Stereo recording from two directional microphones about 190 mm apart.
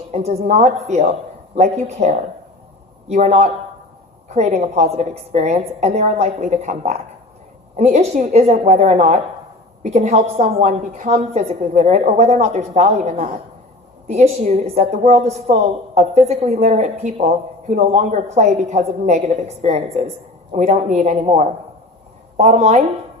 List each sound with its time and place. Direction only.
0.1 s a woman's voice: 35° right (ahead or behind)